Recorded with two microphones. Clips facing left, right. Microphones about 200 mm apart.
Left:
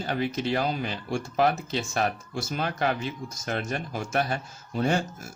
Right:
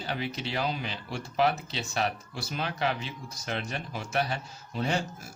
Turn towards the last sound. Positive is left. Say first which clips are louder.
# left 4 dB
turn(degrees=50)  # may be behind; listen again after turning